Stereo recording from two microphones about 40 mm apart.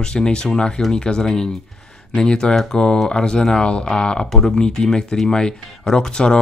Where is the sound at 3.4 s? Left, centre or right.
Centre.